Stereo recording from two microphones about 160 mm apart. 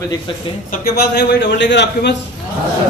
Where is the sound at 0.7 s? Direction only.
75° left (ahead or behind).